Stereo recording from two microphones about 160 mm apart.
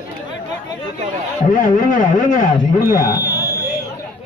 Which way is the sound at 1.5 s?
55° left (ahead or behind).